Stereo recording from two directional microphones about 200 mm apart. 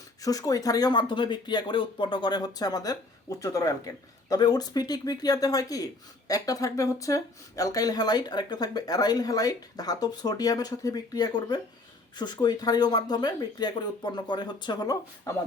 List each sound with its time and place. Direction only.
0.2 s speech: 20° left (ahead or behind)